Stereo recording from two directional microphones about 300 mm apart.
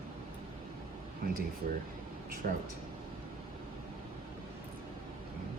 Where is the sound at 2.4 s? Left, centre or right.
Right.